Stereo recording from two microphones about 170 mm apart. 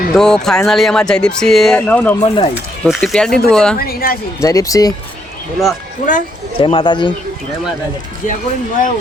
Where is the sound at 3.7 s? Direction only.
60° left (ahead or behind).